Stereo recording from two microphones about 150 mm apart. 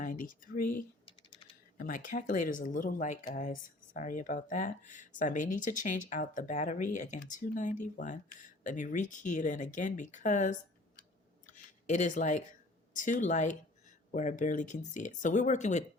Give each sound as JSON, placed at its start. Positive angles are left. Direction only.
{"t": 0.0, "sound": "speech", "side_deg": 65}
{"t": 1.0, "sound": "typing", "side_deg": 35}
{"t": 1.8, "sound": "speech", "side_deg": 60}
{"t": 11.4, "sound": "a sound", "side_deg": 55}
{"t": 13.0, "sound": "speech", "side_deg": 60}